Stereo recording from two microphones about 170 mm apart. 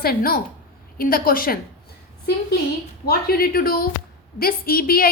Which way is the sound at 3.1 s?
60° left (ahead or behind).